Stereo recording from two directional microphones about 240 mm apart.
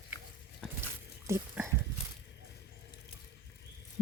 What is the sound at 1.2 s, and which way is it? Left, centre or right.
Speech, centre.